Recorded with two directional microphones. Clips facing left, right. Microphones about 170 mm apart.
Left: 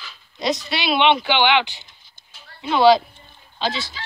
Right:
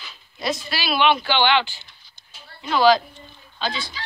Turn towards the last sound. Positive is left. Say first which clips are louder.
# left 3 dB
turn(degrees=25)  # may be behind; listen again after turning